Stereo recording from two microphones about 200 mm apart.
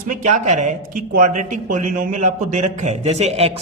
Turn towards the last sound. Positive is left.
turn(degrees=-30)  # may be behind; listen again after turning